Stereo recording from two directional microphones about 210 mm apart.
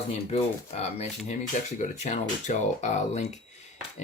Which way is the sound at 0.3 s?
30° left (ahead or behind).